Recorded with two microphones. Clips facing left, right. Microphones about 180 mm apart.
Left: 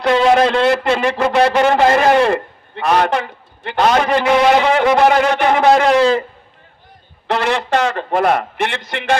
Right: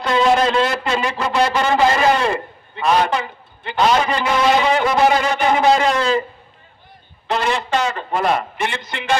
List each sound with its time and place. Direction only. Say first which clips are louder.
0.0 s a man's voice: left 3 dB; 65° left (ahead or behind)
7.2 s a man's voice: left 3 dB; 65° left (ahead or behind)